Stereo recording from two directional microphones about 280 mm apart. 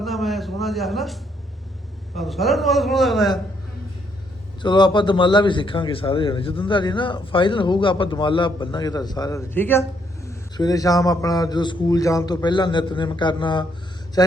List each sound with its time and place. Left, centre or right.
0.0 s a sound: centre
2.1 s a man's voice: centre
4.6 s a man's voice: centre